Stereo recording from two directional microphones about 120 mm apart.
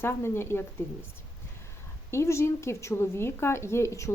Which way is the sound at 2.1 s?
25° left (ahead or behind).